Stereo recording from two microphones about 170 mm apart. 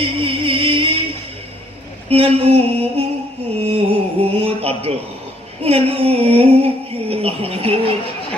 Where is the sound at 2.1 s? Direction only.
35° right (ahead or behind).